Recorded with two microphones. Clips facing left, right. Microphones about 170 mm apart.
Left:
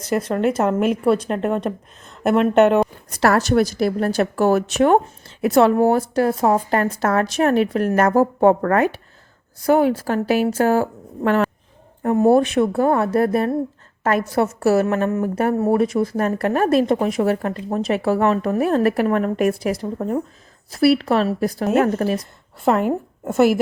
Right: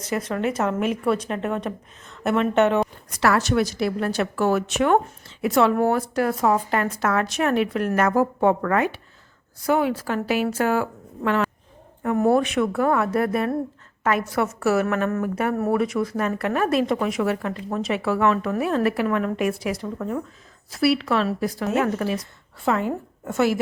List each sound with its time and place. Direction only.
0.2 s a woman's voice: 30° left (ahead or behind)
3.1 s a woman's voice: 40° left (ahead or behind)